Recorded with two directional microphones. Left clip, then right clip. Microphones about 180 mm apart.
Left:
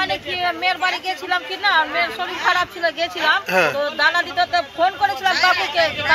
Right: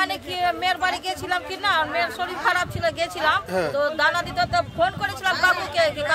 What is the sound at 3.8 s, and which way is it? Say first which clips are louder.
A man's voice: left 3 dB; 35° right (ahead or behind).